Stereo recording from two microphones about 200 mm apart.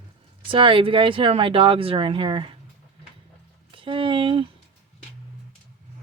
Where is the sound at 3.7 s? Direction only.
25° right (ahead or behind).